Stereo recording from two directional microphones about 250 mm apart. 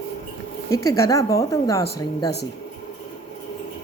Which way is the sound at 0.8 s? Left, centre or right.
Centre.